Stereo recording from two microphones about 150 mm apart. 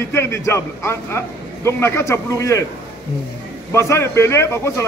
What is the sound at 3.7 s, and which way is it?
A man's voice, 20° left (ahead or behind).